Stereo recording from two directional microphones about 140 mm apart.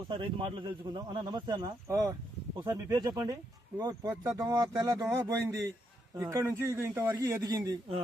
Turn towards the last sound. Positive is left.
turn(degrees=-25)  # may be behind; listen again after turning